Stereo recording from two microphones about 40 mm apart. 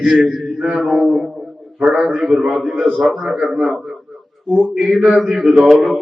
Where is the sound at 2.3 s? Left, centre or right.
Centre.